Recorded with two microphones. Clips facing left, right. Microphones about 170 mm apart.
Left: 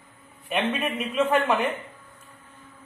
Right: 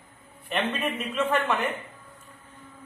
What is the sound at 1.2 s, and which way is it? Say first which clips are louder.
Speech: left 4 dB; 10° left (ahead or behind).